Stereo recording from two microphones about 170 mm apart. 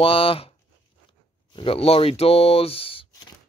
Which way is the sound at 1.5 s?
30° left (ahead or behind).